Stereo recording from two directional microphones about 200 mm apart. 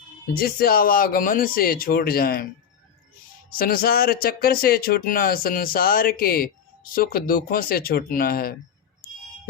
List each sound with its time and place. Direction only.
0.3 s speech: 50° left (ahead or behind)
3.5 s speech: 45° left (ahead or behind)